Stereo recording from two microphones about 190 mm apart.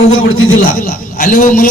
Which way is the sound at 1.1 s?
45° left (ahead or behind).